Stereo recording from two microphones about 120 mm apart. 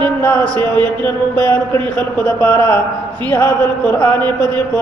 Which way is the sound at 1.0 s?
15° left (ahead or behind).